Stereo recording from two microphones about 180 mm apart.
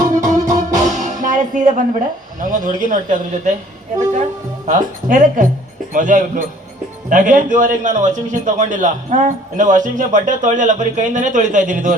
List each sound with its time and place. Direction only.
0.1 s music: 45° right (ahead or behind)
2.4 s a man's voice: 45° right (ahead or behind)
4.6 s a man's voice: 45° right (ahead or behind)